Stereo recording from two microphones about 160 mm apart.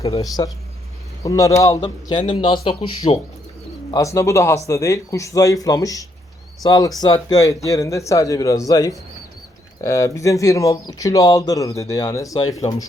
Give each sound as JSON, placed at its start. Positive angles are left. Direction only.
{"t": 0.2, "sound": "speech", "side_deg": 20}
{"t": 3.9, "sound": "speech", "side_deg": 20}